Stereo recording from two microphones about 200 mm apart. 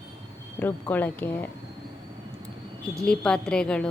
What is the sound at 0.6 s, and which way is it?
Speech, 10° left (ahead or behind).